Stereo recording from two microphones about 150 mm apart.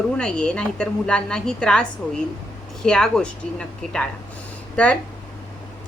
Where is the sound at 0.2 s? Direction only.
5° left (ahead or behind).